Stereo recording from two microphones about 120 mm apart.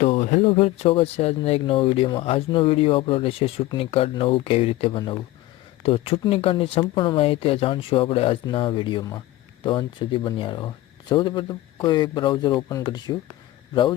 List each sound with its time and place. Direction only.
0.0 s a sound: 65° left (ahead or behind)
0.4 s speech: 60° left (ahead or behind); by 5.1 s 40° left (ahead or behind)
5.8 s speech: 55° left (ahead or behind); by 13.1 s 30° left (ahead or behind)